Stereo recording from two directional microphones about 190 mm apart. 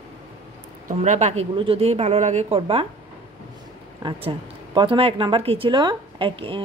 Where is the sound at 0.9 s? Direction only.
40° right (ahead or behind).